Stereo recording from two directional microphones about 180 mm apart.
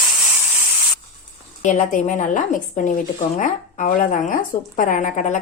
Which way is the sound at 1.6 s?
40° left (ahead or behind).